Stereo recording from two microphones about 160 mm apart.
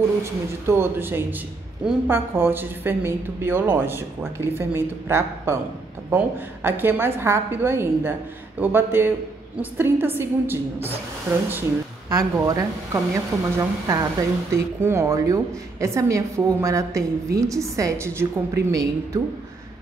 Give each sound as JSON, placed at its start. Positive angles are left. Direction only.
{"t": 0.2, "sound": "a woman's voice", "side_deg": -15}
{"t": 12.1, "sound": "a woman's voice", "side_deg": -20}